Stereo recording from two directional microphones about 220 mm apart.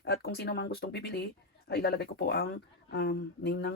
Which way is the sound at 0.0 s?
45° left (ahead or behind).